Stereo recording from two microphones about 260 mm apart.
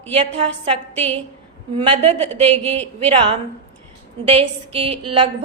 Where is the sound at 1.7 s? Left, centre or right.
Right.